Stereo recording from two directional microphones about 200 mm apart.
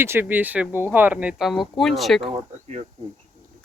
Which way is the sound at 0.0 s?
10° right (ahead or behind).